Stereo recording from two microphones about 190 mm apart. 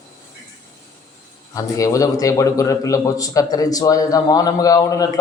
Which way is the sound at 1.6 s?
15° left (ahead or behind).